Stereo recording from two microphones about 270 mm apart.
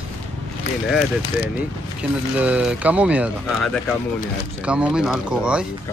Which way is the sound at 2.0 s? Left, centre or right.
Centre.